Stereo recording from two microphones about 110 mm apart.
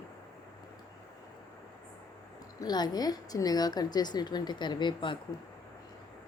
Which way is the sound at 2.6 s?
40° left (ahead or behind).